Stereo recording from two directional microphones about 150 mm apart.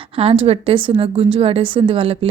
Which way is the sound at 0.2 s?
40° right (ahead or behind).